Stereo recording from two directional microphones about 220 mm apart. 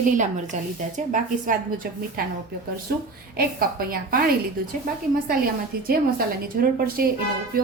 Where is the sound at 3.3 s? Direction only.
40° right (ahead or behind).